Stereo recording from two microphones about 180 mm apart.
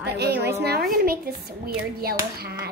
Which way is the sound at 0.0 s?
65° right (ahead or behind).